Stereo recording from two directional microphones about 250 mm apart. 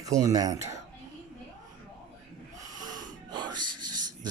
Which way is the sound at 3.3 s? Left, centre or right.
Centre.